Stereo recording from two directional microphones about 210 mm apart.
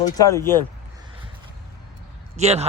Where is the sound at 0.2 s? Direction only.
15° left (ahead or behind).